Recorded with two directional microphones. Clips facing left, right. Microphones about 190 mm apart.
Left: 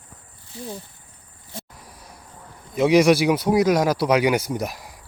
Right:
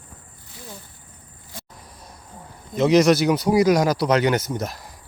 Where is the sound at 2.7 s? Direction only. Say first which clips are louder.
Even; 10° left (ahead or behind).